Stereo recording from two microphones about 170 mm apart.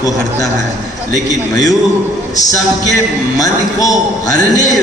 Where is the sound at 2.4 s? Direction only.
20° left (ahead or behind).